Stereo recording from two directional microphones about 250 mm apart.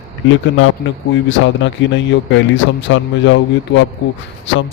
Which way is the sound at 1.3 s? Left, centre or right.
Left.